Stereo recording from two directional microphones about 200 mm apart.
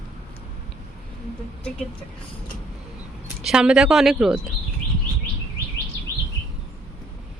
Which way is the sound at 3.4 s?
5° right (ahead or behind).